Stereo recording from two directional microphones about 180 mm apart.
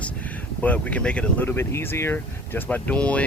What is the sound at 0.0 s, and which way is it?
Speech, 10° left (ahead or behind).